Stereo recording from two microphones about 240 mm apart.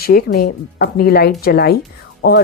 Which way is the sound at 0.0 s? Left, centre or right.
Left.